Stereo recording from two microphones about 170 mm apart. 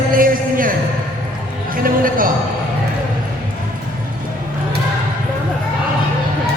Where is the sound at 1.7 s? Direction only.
55° right (ahead or behind).